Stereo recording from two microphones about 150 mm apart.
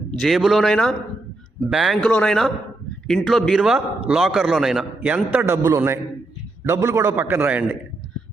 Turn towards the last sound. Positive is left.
turn(degrees=-10)  # may be behind; listen again after turning